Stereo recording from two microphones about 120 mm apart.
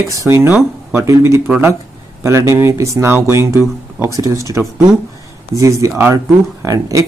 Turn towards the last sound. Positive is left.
turn(degrees=-25)  # may be behind; listen again after turning